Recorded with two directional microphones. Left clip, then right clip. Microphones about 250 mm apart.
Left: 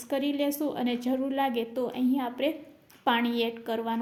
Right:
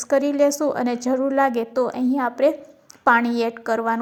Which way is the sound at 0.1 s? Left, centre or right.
Centre.